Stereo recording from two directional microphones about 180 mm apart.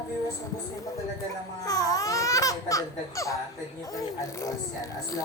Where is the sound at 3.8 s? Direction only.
20° left (ahead or behind).